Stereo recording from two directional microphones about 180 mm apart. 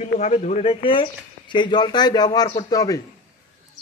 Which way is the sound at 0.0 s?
40° left (ahead or behind).